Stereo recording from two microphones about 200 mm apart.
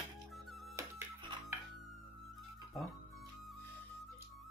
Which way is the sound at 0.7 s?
15° right (ahead or behind).